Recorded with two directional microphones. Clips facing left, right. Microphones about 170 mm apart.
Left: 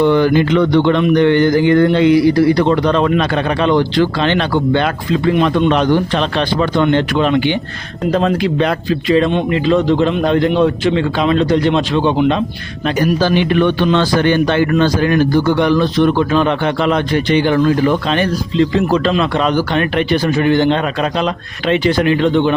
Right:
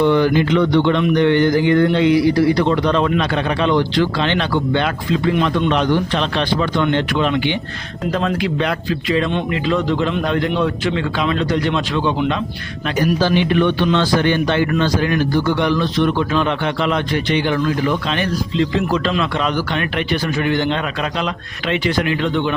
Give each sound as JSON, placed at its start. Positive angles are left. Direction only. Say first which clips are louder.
{"t": 0.0, "sound": "a man's voice", "louder": "left 3 dB", "side_deg": 50}
{"t": 13.0, "sound": "a man's voice", "louder": "left 2 dB", "side_deg": 55}